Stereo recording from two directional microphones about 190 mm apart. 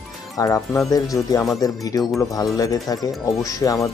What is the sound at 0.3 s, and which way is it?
Speech, 15° left (ahead or behind).